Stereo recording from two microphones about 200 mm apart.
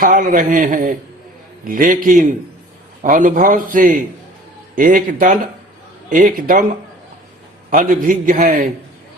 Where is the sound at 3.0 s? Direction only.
40° right (ahead or behind).